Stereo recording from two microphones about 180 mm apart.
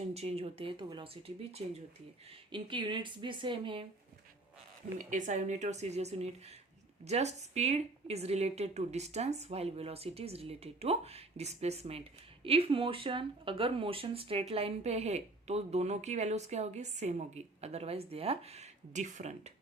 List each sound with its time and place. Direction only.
0.1 s speech: 35° right (ahead or behind)
4.9 s speech: 45° right (ahead or behind)